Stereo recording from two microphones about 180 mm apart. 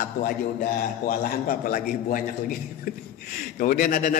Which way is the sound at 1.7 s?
50° left (ahead or behind).